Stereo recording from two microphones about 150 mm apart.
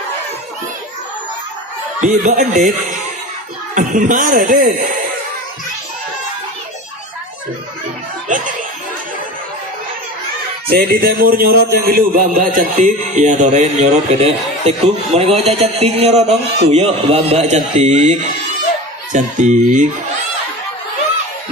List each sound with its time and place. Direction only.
2.0 s a man's voice: 55° right (ahead or behind); by 4.8 s 75° right (ahead or behind)
8.3 s a man's voice: 60° right (ahead or behind)
10.7 s a man's voice: 90° right; by 19.9 s 55° right (ahead or behind)